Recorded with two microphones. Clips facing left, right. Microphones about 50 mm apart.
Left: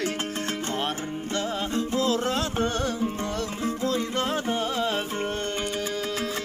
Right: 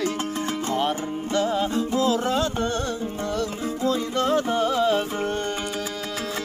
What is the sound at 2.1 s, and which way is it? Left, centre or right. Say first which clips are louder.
Music: right 3 dB; centre.